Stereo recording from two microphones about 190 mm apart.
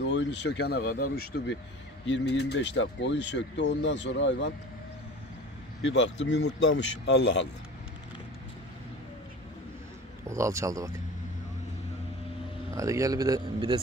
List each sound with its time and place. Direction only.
0.0 s speech: 70° left (ahead or behind); by 1.3 s 50° left (ahead or behind)
2.0 s speech: 65° left (ahead or behind)
5.8 s speech: 75° left (ahead or behind)
10.2 s a man's voice: 15° right (ahead or behind)
12.7 s a man's voice: 15° right (ahead or behind)